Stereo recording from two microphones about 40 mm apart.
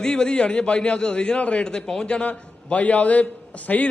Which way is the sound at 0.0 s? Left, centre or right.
Left.